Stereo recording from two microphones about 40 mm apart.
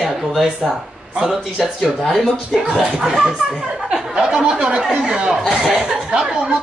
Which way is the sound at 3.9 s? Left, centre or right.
Right.